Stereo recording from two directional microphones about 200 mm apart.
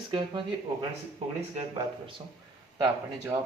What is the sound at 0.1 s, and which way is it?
Speech, 25° right (ahead or behind).